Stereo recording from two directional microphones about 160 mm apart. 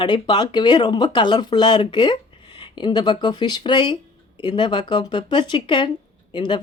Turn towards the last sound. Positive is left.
turn(degrees=30)  # may be behind; listen again after turning